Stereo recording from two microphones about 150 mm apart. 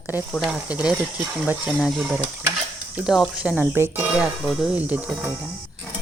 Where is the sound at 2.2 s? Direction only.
15° right (ahead or behind).